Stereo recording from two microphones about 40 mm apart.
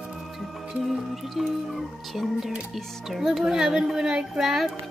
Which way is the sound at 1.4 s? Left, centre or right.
Centre.